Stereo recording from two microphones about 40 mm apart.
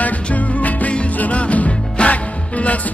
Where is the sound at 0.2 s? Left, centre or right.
Left.